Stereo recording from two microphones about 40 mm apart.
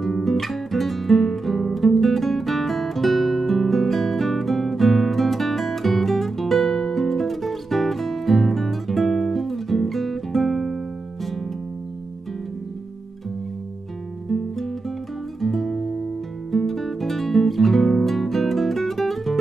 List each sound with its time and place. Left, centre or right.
0.0 s guitar: centre
15.4 s music: centre